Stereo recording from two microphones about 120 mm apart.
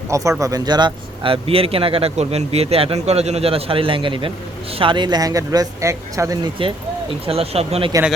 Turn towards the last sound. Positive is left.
turn(degrees=-55)  # may be behind; listen again after turning